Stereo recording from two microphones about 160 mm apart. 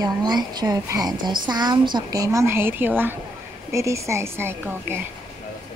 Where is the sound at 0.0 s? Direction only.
25° right (ahead or behind).